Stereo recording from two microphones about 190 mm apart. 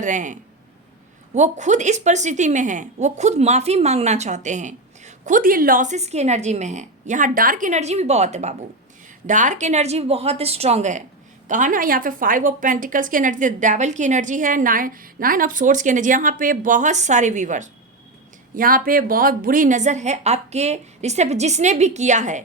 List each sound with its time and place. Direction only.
0.0 s a woman's voice: 40° right (ahead or behind)